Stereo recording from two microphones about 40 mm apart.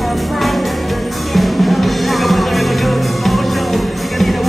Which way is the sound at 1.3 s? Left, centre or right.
Centre.